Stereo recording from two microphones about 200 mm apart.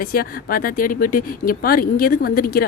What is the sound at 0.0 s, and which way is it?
A woman's voice, 45° left (ahead or behind).